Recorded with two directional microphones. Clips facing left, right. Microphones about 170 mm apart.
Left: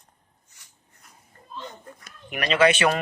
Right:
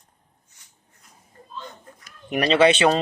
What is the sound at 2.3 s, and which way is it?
Speech, 30° right (ahead or behind).